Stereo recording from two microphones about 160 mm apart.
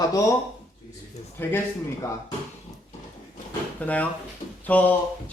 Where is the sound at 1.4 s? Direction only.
15° left (ahead or behind).